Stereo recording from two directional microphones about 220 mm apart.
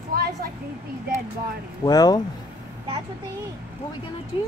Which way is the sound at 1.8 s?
15° left (ahead or behind).